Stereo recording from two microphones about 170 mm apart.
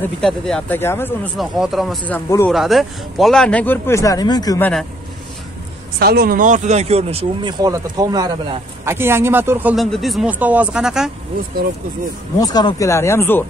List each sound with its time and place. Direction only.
0.2 s speech: 5° left (ahead or behind)
1.4 s speech: centre (ahead or behind)
2.0 s speech: 10° left (ahead or behind)
2.5 s speech: centre (ahead or behind); by 4.6 s 25° left (ahead or behind)
4.6 s speech: 10° left (ahead or behind)
5.9 s speech: 65° right (ahead or behind); by 9.8 s 10° right (ahead or behind)
9.8 s speech: centre (ahead or behind)
12.4 s speech: 25° left (ahead or behind)